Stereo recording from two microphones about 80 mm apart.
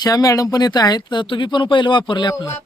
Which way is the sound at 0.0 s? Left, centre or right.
Left.